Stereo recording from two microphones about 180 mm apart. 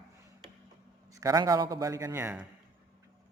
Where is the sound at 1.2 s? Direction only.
20° right (ahead or behind).